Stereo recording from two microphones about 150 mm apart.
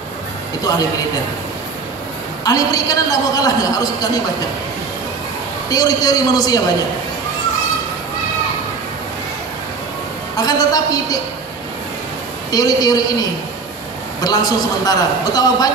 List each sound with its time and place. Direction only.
2.4 s a woman's voice: 25° left (ahead or behind)
5.7 s a woman's voice: 25° left (ahead or behind)
10.3 s a woman's voice: 25° left (ahead or behind)
12.4 s a woman's voice: 25° left (ahead or behind)
14.2 s a woman's voice: 25° left (ahead or behind)